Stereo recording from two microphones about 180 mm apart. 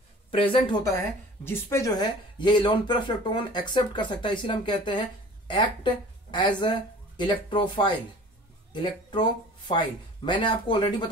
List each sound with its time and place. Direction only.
0.3 s a woman's voice: 30° left (ahead or behind)